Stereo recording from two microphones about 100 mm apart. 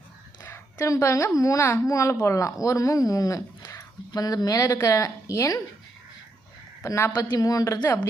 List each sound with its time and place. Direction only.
0.8 s speech: 30° left (ahead or behind)
6.8 s a woman's voice: 30° left (ahead or behind)